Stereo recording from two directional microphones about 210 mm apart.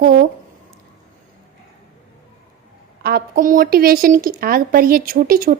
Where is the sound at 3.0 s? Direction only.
45° right (ahead or behind).